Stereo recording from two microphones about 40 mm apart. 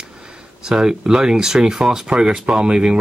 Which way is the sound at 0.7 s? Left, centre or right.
Centre.